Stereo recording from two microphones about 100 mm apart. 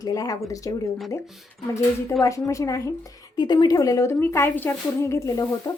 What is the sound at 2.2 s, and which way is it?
Speech, 35° left (ahead or behind).